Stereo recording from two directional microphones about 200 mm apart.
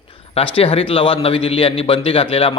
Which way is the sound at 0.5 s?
30° left (ahead or behind).